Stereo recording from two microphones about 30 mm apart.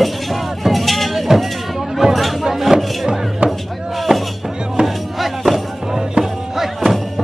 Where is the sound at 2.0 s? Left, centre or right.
Right.